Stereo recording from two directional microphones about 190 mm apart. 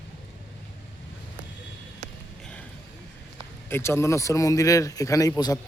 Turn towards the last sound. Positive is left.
turn(degrees=20)  # may be behind; listen again after turning